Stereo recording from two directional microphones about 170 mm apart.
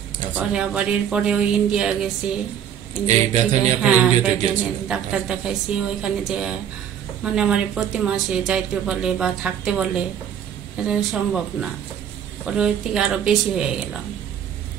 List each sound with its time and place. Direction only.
0.3 s a woman's voice: 5° right (ahead or behind)
3.1 s a sound: 40° right (ahead or behind)
3.8 s a woman's voice: 10° right (ahead or behind)